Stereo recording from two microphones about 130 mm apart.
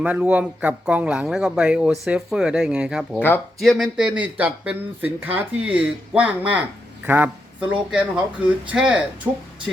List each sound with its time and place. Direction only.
0.0 s a man's voice: 10° right (ahead or behind)
3.2 s speech: 15° left (ahead or behind)
3.6 s a man's voice: centre (ahead or behind)